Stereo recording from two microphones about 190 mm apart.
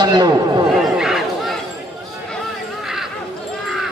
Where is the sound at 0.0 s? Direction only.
20° right (ahead or behind).